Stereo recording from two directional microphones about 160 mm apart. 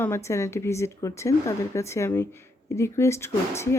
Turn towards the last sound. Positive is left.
turn(degrees=15)  # may be behind; listen again after turning